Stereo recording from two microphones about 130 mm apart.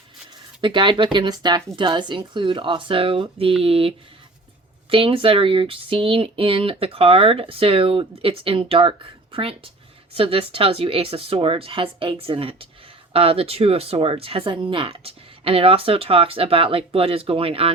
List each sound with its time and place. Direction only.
0.6 s speech: 40° right (ahead or behind)